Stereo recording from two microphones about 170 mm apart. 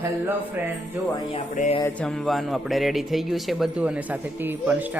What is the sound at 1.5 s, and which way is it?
Music, 50° left (ahead or behind).